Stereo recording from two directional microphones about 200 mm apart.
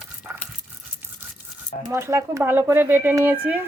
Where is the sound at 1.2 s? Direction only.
10° right (ahead or behind).